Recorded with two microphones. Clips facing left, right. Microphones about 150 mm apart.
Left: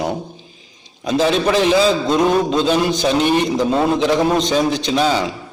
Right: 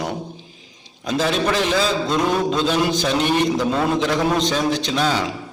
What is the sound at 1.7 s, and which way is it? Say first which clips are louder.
Speech: left 5 dB; 15° left (ahead or behind).